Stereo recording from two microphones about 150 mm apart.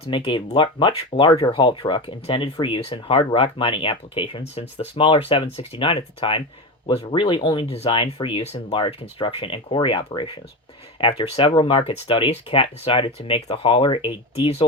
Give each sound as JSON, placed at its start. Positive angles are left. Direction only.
{"t": 0.0, "sound": "speech", "side_deg": 35}